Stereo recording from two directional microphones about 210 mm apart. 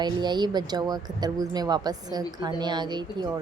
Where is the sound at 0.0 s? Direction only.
20° right (ahead or behind).